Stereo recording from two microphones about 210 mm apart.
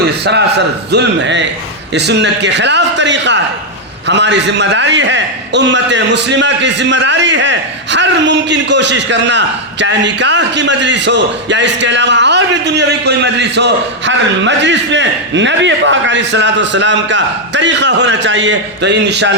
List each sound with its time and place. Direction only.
0.0 s a man's voice: 55° right (ahead or behind)